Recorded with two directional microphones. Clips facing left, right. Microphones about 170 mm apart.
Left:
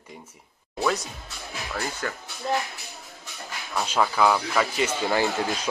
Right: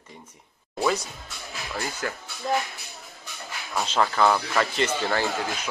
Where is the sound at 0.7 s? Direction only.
5° right (ahead or behind).